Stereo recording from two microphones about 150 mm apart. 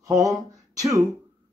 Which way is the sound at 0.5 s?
25° right (ahead or behind).